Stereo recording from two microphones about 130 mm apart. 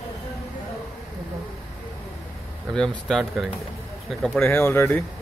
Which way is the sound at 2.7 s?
5° left (ahead or behind).